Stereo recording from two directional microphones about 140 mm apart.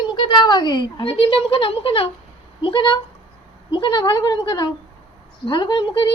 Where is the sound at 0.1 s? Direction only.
35° left (ahead or behind).